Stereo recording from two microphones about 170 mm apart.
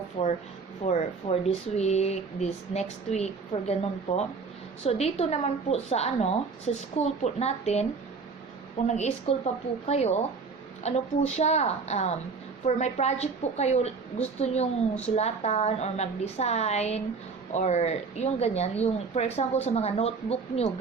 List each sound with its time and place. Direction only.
0.2 s a woman's voice: 35° left (ahead or behind)
9.0 s a woman's voice: 40° left (ahead or behind)